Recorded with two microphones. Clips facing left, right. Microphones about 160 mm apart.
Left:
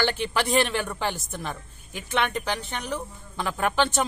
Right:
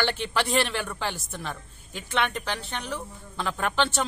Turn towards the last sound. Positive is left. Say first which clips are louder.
# left 2 dB
turn(degrees=10)  # may be behind; listen again after turning